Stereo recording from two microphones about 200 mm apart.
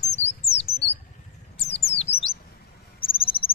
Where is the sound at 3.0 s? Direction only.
25° left (ahead or behind).